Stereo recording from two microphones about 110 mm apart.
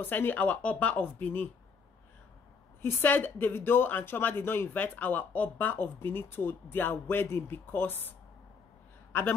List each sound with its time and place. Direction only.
0.0 s speech: 20° left (ahead or behind)
2.8 s speech: 20° left (ahead or behind)